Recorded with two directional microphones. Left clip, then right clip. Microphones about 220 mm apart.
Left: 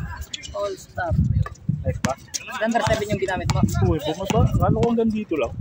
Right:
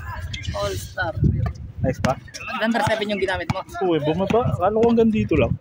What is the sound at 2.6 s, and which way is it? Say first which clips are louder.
Speech: even; 35° right (ahead or behind).